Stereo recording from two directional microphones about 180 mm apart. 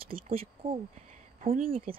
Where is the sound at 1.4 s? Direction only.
50° right (ahead or behind).